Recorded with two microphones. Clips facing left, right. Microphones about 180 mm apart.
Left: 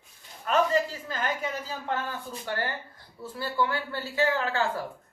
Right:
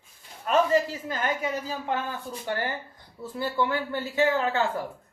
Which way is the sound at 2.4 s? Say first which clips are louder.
Right 2 dB; 15° right (ahead or behind).